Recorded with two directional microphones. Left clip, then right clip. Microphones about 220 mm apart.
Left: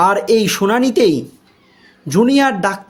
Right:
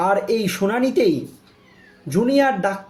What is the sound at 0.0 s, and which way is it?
Speech, 45° left (ahead or behind).